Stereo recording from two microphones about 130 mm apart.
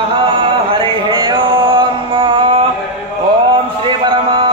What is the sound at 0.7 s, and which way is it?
Chant, 40° right (ahead or behind).